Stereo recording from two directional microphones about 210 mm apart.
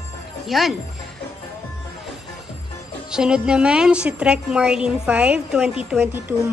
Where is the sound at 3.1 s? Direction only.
5° right (ahead or behind).